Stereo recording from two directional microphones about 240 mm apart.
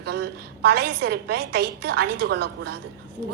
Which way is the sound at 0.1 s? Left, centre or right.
Right.